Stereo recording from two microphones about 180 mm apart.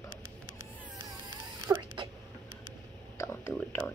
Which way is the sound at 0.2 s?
90° left.